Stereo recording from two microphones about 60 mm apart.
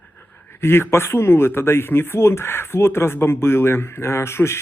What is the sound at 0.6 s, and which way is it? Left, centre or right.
Speech, left.